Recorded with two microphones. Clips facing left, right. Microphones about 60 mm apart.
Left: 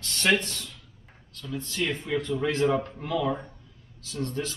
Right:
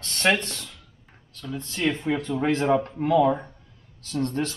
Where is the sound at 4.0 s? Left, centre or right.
Right.